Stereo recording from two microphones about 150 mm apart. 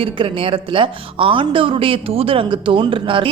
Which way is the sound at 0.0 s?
35° right (ahead or behind).